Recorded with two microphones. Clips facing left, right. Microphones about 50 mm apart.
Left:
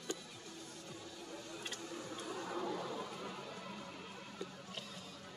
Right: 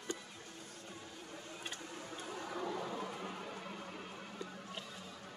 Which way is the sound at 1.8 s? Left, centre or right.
Right.